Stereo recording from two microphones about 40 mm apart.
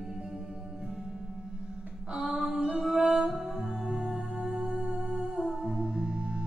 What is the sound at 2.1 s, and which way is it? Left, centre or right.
Music, centre.